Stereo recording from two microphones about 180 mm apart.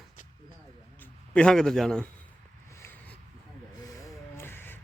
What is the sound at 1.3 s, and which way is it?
Speech, 5° left (ahead or behind).